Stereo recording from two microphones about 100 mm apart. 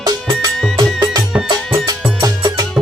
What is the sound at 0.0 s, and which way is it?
Music, 40° right (ahead or behind).